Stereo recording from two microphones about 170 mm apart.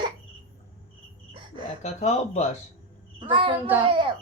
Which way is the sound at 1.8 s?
40° left (ahead or behind).